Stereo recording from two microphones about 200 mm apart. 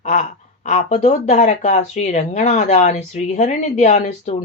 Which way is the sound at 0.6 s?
35° left (ahead or behind).